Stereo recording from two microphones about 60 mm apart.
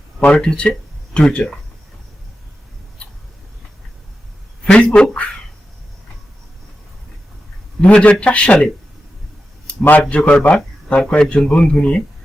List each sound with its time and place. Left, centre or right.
0.2 s speech: centre
4.6 s a sound: centre
5.0 s speech: centre
7.8 s a man's voice: left
9.8 s a man's voice: left